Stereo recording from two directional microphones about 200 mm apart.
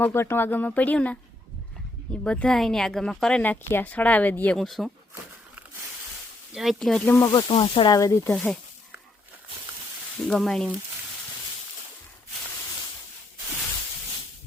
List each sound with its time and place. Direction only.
0.0 s speech: 10° left (ahead or behind)
2.2 s a woman's voice: 5° left (ahead or behind)
6.5 s a woman's voice: centre (ahead or behind)
7.3 s speech: 25° left (ahead or behind)
10.2 s a woman's voice: 5° left (ahead or behind)